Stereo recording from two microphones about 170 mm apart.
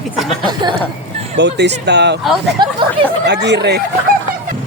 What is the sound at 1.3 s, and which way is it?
Speech, 85° right.